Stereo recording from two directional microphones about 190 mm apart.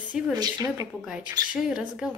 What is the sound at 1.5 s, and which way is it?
Speech, 5° right (ahead or behind).